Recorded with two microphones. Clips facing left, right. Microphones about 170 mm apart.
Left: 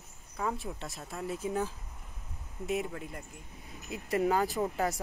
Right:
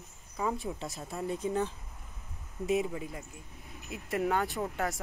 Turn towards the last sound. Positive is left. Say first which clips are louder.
# left 2 dB
turn(degrees=0)  # may be behind; listen again after turning